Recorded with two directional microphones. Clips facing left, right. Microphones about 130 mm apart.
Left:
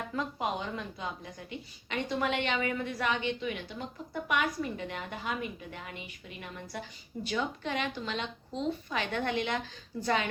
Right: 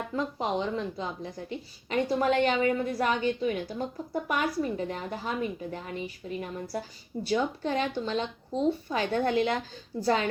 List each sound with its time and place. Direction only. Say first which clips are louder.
0.2 s a woman's voice: right 4 dB; 30° right (ahead or behind)
7.3 s a woman's voice: right 6 dB; 35° right (ahead or behind)